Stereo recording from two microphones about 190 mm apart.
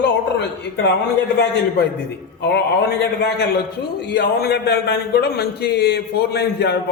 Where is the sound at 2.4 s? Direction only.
60° left (ahead or behind).